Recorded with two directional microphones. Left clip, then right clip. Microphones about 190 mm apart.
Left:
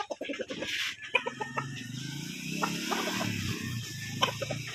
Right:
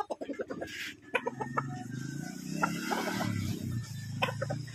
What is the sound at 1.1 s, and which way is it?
Chicken, 5° right (ahead or behind).